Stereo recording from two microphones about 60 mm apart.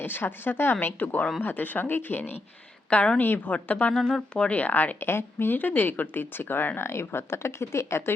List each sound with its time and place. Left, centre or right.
0.0 s speech: left
2.9 s speech: left
3.2 s speech: left